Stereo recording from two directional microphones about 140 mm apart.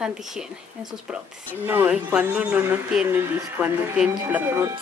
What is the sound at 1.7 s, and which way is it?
Speech, 10° right (ahead or behind).